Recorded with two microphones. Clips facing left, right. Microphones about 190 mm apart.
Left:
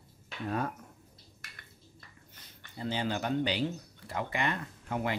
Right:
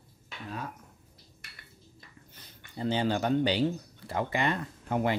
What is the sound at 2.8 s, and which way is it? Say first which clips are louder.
Speech: right 5 dB; 30° right (ahead or behind).